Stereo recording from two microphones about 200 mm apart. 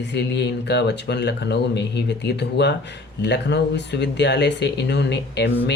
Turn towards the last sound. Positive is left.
turn(degrees=60)  # may be behind; listen again after turning